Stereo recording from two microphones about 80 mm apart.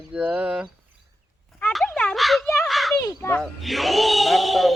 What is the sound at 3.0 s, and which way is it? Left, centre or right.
Children playing, left.